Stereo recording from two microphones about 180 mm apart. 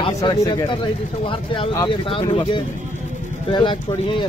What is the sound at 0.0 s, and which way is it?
Speech, 20° left (ahead or behind).